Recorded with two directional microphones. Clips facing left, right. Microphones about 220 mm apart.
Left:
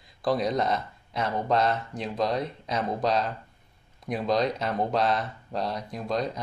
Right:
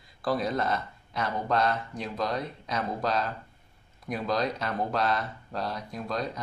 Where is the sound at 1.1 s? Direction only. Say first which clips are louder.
Left 2 dB; 25° left (ahead or behind).